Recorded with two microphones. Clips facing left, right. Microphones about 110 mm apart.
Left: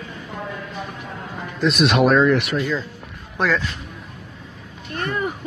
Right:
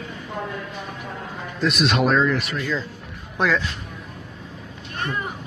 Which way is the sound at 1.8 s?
65° left (ahead or behind).